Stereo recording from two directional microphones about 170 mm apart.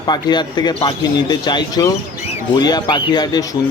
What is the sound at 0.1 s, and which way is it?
Speech, 25° left (ahead or behind).